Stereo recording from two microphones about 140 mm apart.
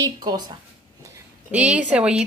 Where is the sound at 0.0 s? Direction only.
30° right (ahead or behind).